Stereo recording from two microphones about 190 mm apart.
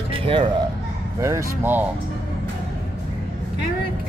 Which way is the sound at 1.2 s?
15° right (ahead or behind).